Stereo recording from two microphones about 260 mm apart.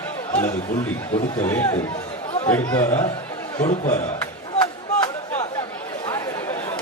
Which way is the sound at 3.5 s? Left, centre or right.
Left.